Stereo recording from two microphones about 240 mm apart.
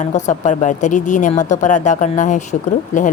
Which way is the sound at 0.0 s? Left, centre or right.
Left.